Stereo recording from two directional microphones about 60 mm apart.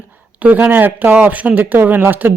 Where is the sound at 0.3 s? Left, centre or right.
Right.